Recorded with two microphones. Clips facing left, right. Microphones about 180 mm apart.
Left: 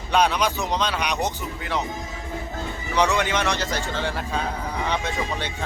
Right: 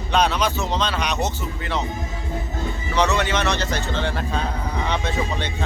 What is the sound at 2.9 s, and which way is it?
Speech, 10° left (ahead or behind).